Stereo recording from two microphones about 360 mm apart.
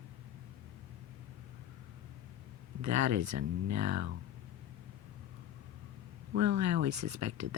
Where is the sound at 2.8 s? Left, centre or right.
Right.